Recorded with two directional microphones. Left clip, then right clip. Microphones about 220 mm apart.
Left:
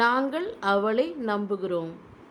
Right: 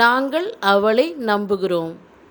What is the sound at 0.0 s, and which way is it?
A woman's voice, 15° right (ahead or behind).